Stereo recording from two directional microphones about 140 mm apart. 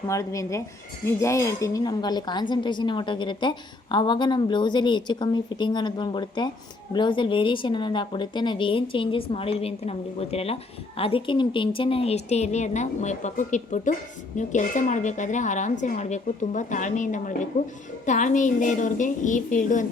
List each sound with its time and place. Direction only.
0.1 s a woman's voice: 20° left (ahead or behind); by 17.3 s 60° left (ahead or behind)
17.5 s a woman's voice: 75° left (ahead or behind)
18.0 s a woman's voice: 60° left (ahead or behind)